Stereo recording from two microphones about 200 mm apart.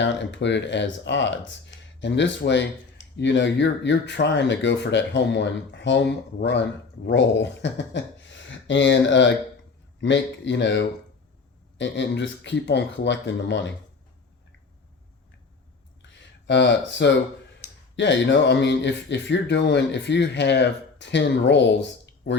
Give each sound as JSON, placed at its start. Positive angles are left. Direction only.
{"t": 0.0, "sound": "speech", "side_deg": 65}
{"t": 16.0, "sound": "a sound", "side_deg": 60}
{"t": 17.9, "sound": "speech", "side_deg": 65}